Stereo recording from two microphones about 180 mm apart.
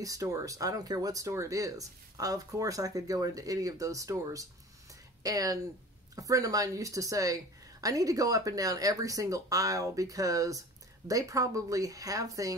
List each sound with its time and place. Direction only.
0.0 s speech: 20° right (ahead or behind)